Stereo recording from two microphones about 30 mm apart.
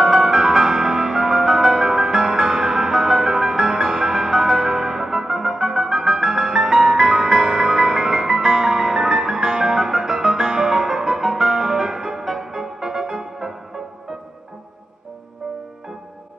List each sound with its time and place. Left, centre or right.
0.0 s music: centre